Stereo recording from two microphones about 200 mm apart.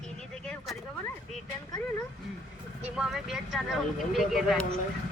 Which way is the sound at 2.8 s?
5° right (ahead or behind).